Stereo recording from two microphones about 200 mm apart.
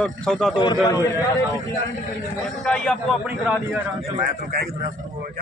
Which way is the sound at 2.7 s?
5° left (ahead or behind).